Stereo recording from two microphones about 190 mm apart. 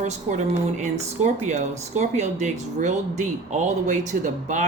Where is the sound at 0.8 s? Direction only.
35° right (ahead or behind).